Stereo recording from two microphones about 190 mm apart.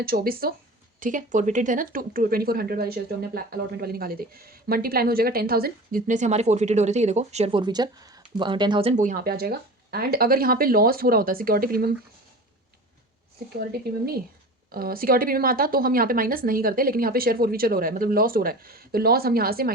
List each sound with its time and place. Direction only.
0.0 s speech: 50° right (ahead or behind)
13.6 s speech: 55° right (ahead or behind)